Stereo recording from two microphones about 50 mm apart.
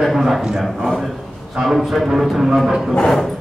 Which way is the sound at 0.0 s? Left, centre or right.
Centre.